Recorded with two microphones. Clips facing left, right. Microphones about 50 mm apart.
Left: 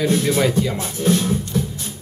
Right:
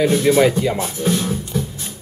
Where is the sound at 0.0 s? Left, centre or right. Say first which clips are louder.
Right 4 dB; centre.